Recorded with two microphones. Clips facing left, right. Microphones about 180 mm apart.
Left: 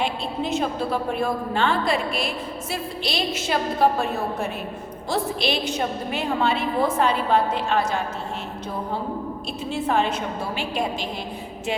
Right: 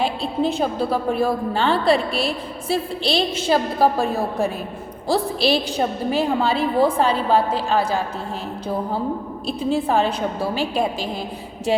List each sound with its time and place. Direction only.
0.0 s a woman's voice: 30° right (ahead or behind)
9.5 s a woman's voice: 35° right (ahead or behind)